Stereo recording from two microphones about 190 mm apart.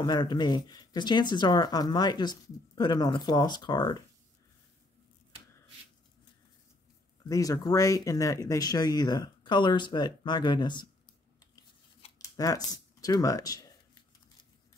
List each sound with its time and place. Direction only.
0.0 s speech: 20° left (ahead or behind)
7.2 s speech: 20° left (ahead or behind)
12.2 s speech: 20° left (ahead or behind)